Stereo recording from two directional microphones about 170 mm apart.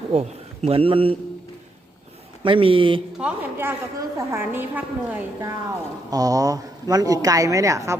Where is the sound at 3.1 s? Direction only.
10° right (ahead or behind).